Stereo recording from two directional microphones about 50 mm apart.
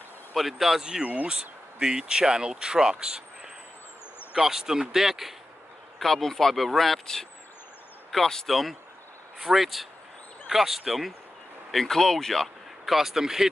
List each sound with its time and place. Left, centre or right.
0.3 s speech: centre
1.0 s speech: right
4.4 s speech: centre
5.9 s speech: centre